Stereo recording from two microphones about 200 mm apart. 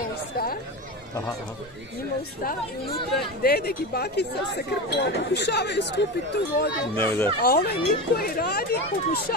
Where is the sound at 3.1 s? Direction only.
50° left (ahead or behind).